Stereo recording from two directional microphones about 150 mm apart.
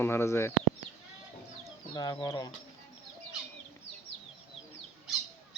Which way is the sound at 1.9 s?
25° left (ahead or behind).